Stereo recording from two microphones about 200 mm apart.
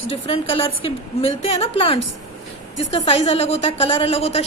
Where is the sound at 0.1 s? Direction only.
25° left (ahead or behind).